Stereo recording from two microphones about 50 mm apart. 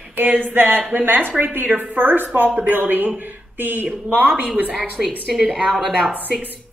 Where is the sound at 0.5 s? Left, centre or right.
Right.